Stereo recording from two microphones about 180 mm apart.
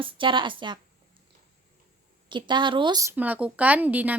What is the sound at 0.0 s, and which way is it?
Speech, 25° right (ahead or behind).